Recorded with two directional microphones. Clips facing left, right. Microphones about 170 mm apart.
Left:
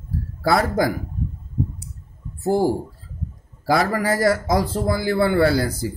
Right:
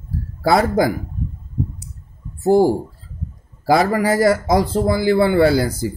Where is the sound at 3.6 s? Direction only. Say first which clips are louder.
Right 4 dB; 25° right (ahead or behind).